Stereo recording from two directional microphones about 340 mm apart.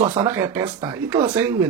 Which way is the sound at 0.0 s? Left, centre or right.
Centre.